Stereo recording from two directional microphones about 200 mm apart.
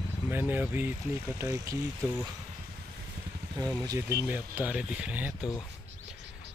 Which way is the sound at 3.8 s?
15° right (ahead or behind).